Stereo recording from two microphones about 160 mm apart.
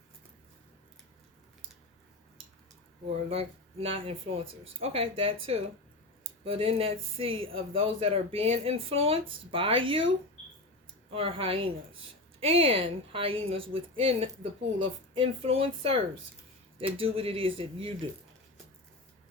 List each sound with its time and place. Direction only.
3.2 s speech: 40° right (ahead or behind)